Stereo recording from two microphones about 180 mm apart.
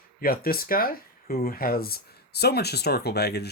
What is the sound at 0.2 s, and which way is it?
Speech, 55° left (ahead or behind).